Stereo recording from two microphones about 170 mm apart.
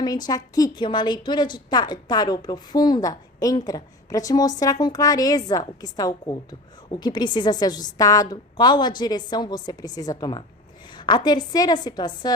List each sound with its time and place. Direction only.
0.3 s a woman's voice: 20° left (ahead or behind)